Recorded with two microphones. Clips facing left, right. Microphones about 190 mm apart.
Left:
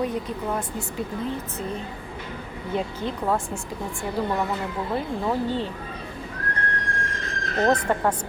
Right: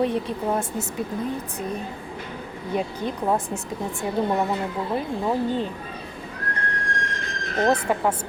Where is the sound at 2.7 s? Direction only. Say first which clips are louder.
Right 1 dB; 15° right (ahead or behind).